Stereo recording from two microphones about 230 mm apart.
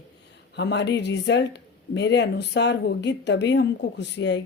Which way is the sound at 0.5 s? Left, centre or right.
Left.